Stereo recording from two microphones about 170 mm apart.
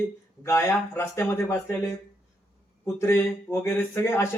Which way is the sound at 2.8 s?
15° left (ahead or behind).